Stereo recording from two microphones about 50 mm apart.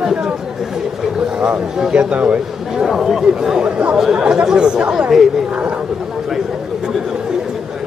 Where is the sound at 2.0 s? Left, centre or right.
Right.